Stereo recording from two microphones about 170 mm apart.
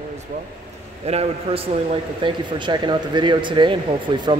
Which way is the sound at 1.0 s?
35° right (ahead or behind).